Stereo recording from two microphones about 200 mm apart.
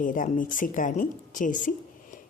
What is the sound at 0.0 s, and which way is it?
A woman's voice, 40° left (ahead or behind).